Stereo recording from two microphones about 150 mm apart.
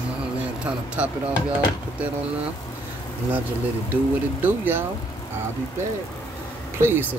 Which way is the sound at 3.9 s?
10° right (ahead or behind).